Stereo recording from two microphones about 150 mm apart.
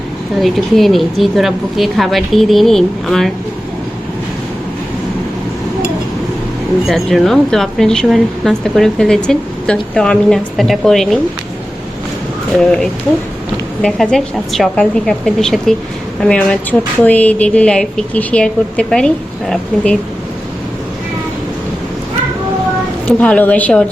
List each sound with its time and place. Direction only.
0.4 s speech: centre (ahead or behind)
6.8 s speech: centre (ahead or behind)
13.8 s a woman's voice: 5° left (ahead or behind)
23.0 s a woman's voice: 10° left (ahead or behind)